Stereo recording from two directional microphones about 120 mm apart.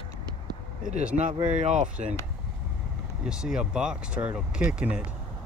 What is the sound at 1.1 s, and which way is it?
Speech, 80° right.